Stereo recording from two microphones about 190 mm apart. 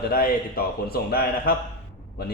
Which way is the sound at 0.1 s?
50° left (ahead or behind).